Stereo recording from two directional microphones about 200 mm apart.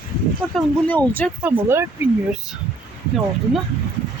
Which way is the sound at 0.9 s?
5° left (ahead or behind).